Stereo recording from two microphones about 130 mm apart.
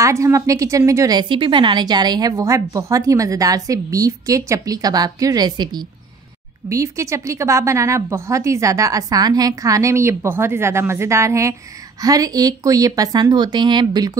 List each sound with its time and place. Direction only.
0.0 s a woman's voice: 25° right (ahead or behind)